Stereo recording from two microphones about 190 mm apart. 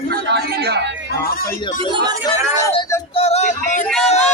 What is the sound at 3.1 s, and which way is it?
Music, 35° left (ahead or behind).